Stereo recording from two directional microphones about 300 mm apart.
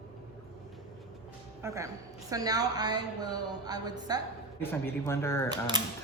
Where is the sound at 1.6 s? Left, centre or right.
Centre.